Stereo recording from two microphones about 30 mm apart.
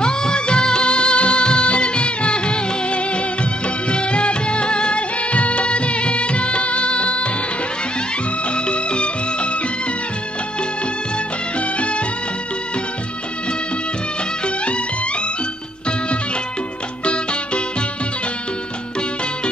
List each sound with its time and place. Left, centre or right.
0.0 s music: left
3.9 s music of bollywood: left
5.3 s music of bollywood: left
8.6 s music: left
17.0 s music: left